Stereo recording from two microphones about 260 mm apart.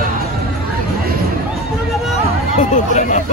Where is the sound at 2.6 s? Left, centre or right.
Left.